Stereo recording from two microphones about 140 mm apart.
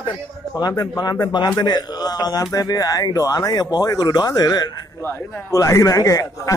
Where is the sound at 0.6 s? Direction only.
30° left (ahead or behind).